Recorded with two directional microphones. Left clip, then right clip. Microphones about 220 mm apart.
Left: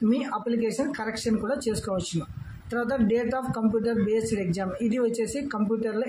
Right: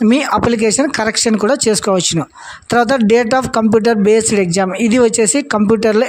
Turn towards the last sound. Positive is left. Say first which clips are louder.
# right 15 dB
turn(degrees=-45)  # may be behind; listen again after turning